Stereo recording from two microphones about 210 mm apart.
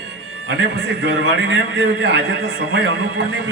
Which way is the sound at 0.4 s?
55° right (ahead or behind).